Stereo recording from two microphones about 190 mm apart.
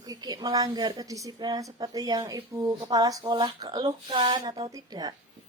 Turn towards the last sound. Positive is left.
turn(degrees=-20)  # may be behind; listen again after turning